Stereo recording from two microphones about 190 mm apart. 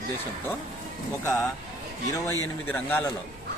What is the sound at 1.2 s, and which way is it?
Speech, 15° left (ahead or behind).